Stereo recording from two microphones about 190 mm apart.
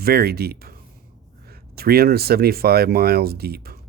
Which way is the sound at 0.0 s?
55° right (ahead or behind).